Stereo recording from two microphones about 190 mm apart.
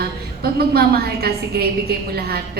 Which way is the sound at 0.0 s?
55° right (ahead or behind).